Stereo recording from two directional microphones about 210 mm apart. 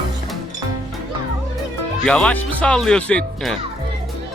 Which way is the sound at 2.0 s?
5° left (ahead or behind).